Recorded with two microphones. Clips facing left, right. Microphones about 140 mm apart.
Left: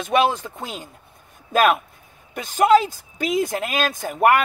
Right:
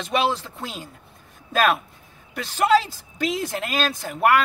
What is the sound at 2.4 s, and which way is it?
A woman's voice, 45° left (ahead or behind).